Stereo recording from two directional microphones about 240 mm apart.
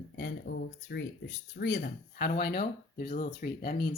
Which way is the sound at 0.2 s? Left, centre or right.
Left.